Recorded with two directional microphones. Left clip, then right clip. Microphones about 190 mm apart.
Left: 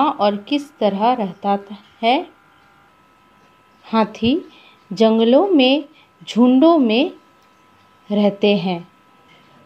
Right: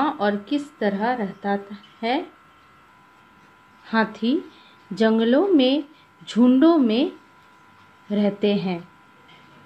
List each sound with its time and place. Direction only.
0.0 s a woman's voice: 25° left (ahead or behind)
3.8 s a woman's voice: 25° left (ahead or behind)
8.1 s a woman's voice: 25° left (ahead or behind)